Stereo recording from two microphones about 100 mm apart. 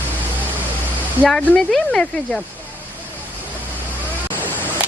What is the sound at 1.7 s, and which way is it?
Speech, 5° left (ahead or behind).